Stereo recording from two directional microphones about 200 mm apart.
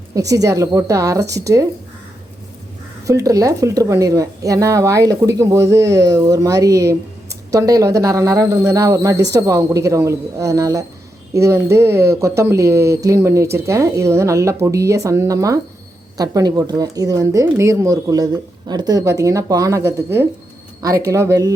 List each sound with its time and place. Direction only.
0.1 s speech: 15° right (ahead or behind)
3.1 s speech: 15° right (ahead or behind)